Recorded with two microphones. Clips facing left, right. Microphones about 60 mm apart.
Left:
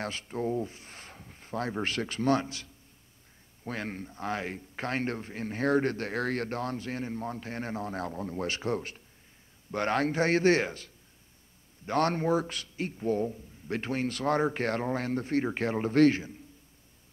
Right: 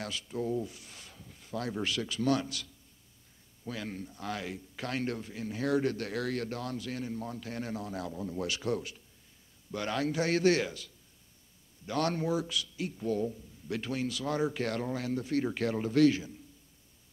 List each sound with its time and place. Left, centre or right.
0.0 s speech: left
3.6 s speech: left